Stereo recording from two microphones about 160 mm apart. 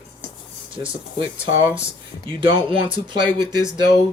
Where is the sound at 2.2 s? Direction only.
30° right (ahead or behind).